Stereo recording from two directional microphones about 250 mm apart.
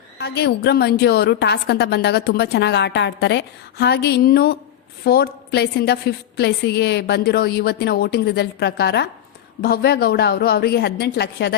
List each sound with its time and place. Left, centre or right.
0.2 s a woman's voice: left